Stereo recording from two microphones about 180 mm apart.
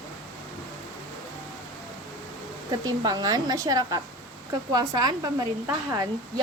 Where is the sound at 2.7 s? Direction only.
20° right (ahead or behind).